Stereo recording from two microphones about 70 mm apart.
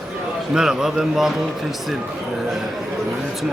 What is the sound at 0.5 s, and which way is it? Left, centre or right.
Speech, centre.